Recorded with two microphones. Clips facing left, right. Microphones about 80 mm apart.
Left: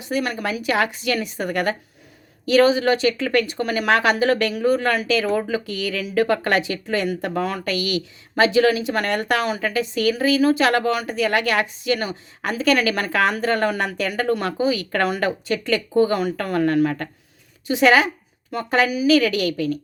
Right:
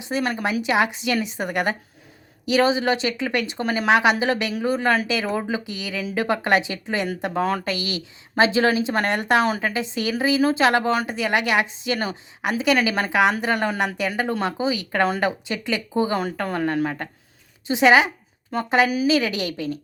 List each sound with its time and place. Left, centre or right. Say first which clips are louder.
0.0 s speech: even; right
12.4 s a woman's voice: left 1 dB; centre